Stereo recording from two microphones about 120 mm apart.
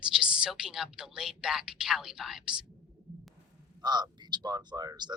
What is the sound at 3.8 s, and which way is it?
Speech, 35° right (ahead or behind).